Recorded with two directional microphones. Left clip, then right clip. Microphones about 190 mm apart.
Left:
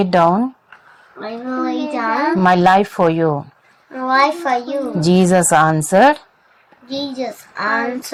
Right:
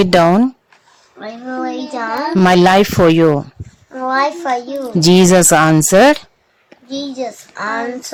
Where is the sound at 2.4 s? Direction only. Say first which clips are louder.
Right 3 dB; 45° right (ahead or behind).